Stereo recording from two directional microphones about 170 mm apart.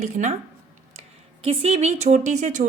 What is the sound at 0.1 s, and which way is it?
Speech, 45° right (ahead or behind).